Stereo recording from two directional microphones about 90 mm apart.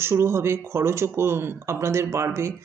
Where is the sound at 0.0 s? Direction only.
30° right (ahead or behind).